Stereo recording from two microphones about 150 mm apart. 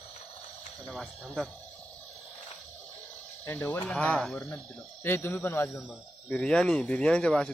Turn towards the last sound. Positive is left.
turn(degrees=5)  # may be behind; listen again after turning